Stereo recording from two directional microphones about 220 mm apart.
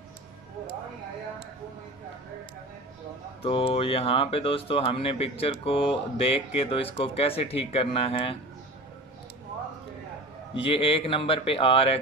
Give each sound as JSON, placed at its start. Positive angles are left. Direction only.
{"t": 3.4, "sound": "speech", "side_deg": 25}
{"t": 10.5, "sound": "speech", "side_deg": 25}